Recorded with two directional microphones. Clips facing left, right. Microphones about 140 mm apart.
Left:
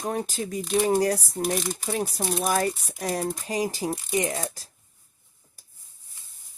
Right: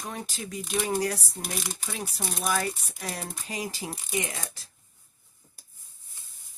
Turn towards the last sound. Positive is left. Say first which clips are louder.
# left 8 dB
turn(degrees=40)  # may be behind; listen again after turning